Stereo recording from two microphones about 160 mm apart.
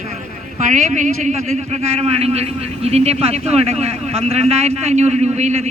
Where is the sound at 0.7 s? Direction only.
50° right (ahead or behind).